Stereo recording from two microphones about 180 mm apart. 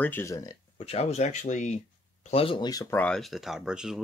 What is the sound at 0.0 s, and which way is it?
Speech, 15° left (ahead or behind).